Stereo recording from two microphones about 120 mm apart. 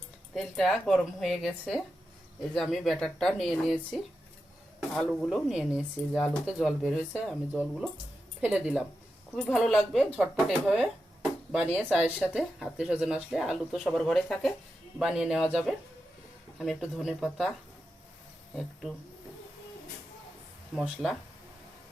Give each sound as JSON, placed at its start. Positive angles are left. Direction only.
{"t": 0.3, "sound": "speech", "side_deg": 0}
{"t": 9.3, "sound": "speech", "side_deg": 0}
{"t": 16.6, "sound": "speech", "side_deg": -5}
{"t": 18.5, "sound": "speech", "side_deg": 0}
{"t": 20.7, "sound": "speech", "side_deg": -5}